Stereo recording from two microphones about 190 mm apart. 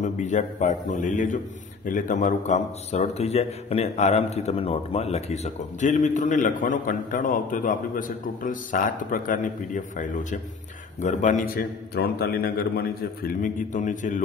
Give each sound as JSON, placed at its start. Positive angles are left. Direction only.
{"t": 0.0, "sound": "a man's voice", "side_deg": 40}
{"t": 13.4, "sound": "a man's voice", "side_deg": 40}